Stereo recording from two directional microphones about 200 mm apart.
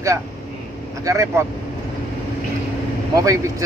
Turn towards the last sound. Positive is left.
turn(degrees=-15)  # may be behind; listen again after turning